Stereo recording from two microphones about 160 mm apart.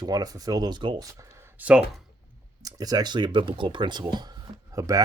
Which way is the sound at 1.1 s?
15° right (ahead or behind).